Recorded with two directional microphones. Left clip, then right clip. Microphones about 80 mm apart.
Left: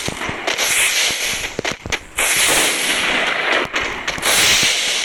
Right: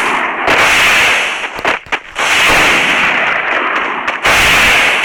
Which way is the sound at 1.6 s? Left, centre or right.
Left.